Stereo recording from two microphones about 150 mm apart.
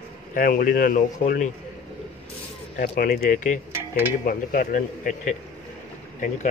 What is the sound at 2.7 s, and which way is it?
Speech, 80° left.